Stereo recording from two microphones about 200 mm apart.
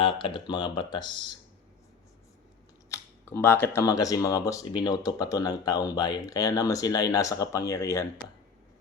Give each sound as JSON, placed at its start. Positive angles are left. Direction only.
{"t": 0.0, "sound": "speech", "side_deg": 25}
{"t": 2.9, "sound": "speech", "side_deg": 10}